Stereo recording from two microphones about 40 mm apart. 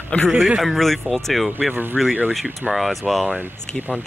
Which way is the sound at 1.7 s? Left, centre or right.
Right.